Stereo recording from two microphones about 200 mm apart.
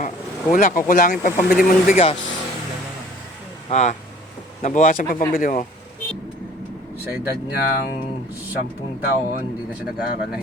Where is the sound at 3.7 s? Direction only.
35° left (ahead or behind).